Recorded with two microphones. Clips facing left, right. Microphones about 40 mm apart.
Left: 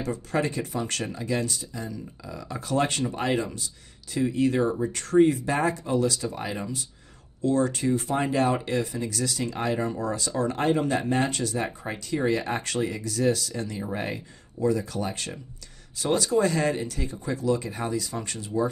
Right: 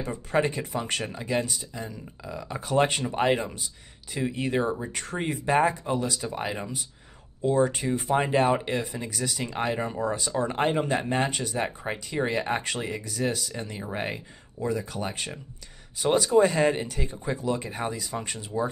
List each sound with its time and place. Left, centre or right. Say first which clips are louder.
0.0 s speech: right 1 dB; centre